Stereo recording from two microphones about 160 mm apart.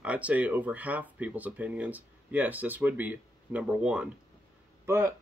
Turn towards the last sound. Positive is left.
turn(degrees=-15)  # may be behind; listen again after turning